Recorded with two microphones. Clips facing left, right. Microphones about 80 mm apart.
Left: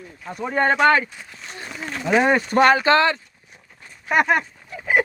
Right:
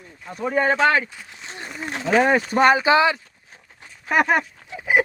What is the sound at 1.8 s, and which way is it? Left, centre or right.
Speech, right.